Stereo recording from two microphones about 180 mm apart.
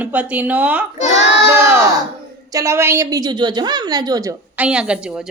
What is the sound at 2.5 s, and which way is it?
A woman's voice, 15° right (ahead or behind).